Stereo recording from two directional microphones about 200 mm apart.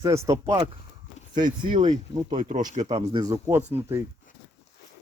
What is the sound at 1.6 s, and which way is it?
Speech, 40° right (ahead or behind).